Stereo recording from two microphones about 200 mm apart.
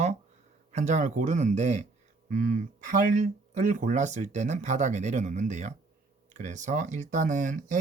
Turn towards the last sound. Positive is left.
turn(degrees=-40)  # may be behind; listen again after turning